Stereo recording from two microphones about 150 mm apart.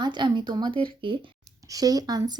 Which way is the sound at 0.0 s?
30° right (ahead or behind).